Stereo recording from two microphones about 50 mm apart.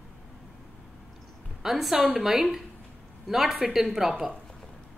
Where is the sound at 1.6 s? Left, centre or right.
Centre.